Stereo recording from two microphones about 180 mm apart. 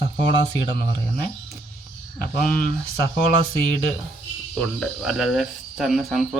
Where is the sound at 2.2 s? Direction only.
55° left (ahead or behind).